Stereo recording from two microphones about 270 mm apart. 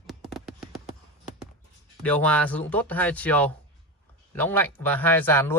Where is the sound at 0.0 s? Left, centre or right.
Centre.